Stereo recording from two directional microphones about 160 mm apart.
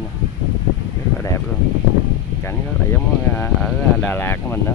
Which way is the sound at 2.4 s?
15° left (ahead or behind).